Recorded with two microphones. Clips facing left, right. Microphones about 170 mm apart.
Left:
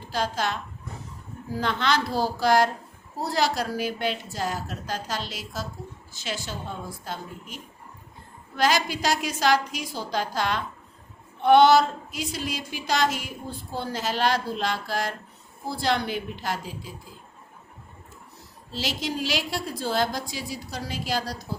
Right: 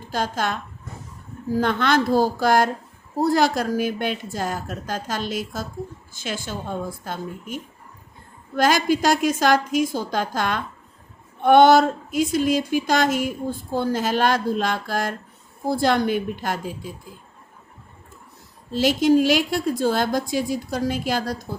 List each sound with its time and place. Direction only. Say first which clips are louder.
0.1 s speech: right 3 dB; 50° right (ahead or behind)
18.7 s speech: right 13 dB; 50° right (ahead or behind)